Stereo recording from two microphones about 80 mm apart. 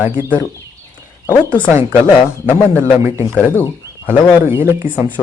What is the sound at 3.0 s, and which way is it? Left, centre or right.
Speech, right.